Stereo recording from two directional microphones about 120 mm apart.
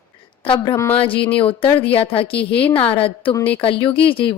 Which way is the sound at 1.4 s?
50° left (ahead or behind).